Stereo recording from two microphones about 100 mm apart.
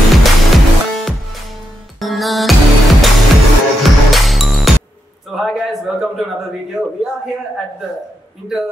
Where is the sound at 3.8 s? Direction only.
Centre (ahead or behind).